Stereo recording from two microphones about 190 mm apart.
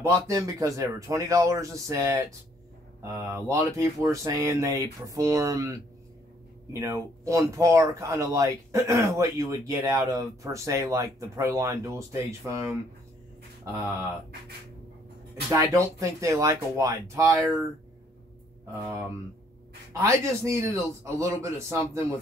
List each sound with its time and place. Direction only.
0.0 s speech: 15° right (ahead or behind)
15.5 s speech: 15° right (ahead or behind)
20.0 s speech: 15° right (ahead or behind)